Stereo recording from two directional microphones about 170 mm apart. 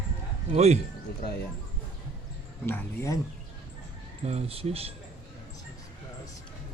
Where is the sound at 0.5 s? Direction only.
40° right (ahead or behind).